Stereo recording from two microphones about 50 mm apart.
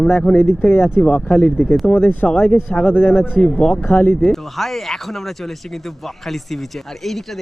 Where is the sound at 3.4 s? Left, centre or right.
Centre.